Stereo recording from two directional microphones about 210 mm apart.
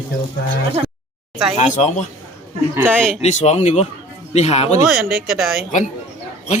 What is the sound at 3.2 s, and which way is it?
Speech, 30° left (ahead or behind).